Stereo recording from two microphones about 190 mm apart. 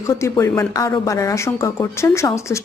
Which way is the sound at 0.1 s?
15° left (ahead or behind).